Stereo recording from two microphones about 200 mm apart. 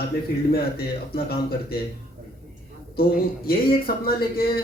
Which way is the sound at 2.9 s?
50° left (ahead or behind).